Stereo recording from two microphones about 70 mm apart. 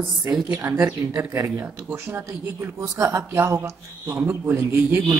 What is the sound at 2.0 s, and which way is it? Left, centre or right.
Speech, right.